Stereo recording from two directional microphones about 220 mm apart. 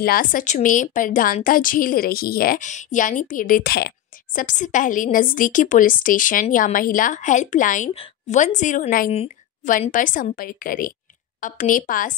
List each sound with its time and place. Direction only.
0.0 s speech: 40° left (ahead or behind)